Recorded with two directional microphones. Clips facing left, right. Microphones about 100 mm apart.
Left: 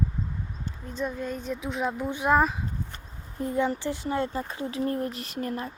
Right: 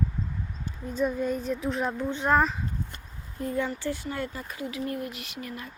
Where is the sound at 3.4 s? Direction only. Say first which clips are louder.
Left 3 dB; 20° left (ahead or behind); by 5.7 s 40° left (ahead or behind).